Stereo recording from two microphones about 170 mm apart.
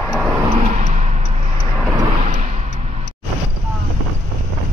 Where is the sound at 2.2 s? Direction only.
40° right (ahead or behind).